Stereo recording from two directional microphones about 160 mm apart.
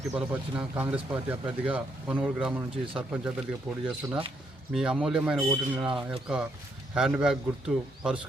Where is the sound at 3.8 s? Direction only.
10° right (ahead or behind).